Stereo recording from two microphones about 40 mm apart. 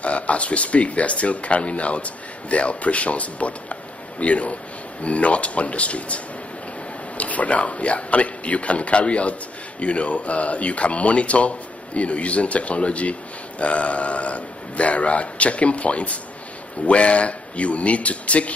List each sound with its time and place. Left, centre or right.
0.0 s a man's voice: left